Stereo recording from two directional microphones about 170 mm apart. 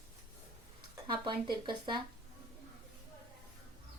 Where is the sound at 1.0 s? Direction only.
25° right (ahead or behind).